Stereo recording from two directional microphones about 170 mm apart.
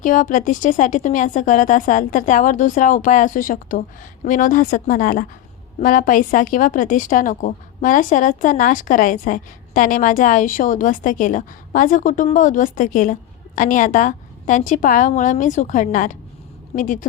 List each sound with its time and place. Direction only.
0.0 s a woman's voice: 50° left (ahead or behind)